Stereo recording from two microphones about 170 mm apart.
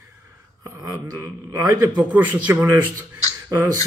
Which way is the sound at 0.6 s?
15° right (ahead or behind).